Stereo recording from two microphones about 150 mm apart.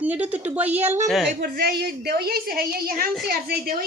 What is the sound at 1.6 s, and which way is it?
A woman's voice, 90° right.